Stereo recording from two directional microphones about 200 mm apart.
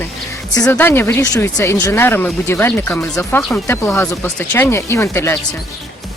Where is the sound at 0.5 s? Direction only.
15° left (ahead or behind).